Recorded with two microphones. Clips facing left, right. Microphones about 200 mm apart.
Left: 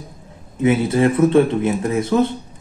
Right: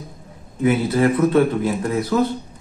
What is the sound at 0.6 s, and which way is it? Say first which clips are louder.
Speech: left 2 dB; 25° left (ahead or behind).